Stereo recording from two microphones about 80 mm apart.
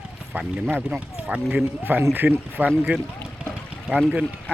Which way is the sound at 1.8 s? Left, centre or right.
Right.